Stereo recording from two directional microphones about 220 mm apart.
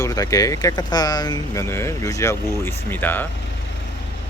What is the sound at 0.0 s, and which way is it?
Speech, 15° left (ahead or behind).